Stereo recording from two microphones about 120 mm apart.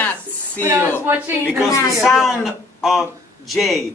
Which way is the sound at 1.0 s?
15° right (ahead or behind).